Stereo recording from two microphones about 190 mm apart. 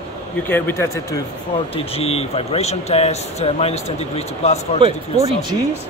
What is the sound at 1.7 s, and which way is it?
Speech, 30° left (ahead or behind).